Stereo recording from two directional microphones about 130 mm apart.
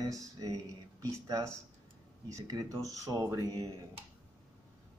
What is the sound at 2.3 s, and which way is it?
Speech, 25° right (ahead or behind).